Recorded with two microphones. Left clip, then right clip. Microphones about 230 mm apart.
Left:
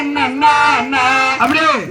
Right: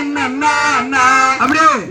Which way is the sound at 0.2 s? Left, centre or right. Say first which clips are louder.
Left 3 dB; right.